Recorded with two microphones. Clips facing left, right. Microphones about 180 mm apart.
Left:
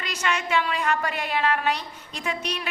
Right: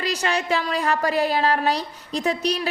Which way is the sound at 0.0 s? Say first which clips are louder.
Right 4 dB; 35° right (ahead or behind).